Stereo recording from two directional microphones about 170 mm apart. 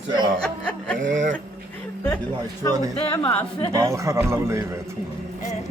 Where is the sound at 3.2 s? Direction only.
30° left (ahead or behind).